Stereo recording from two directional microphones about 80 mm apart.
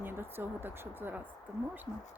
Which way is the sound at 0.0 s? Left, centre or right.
Right.